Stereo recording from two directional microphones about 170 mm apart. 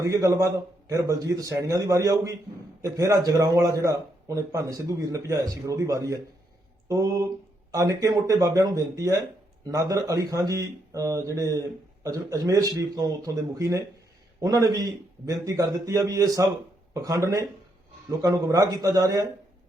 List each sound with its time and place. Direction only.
0.0 s a man's voice: 20° right (ahead or behind)